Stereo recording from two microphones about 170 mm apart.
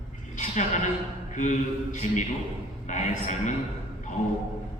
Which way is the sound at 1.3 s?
45° left (ahead or behind).